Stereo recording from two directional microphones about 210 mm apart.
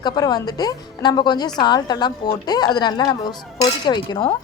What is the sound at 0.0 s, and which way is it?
A woman's voice, 20° left (ahead or behind).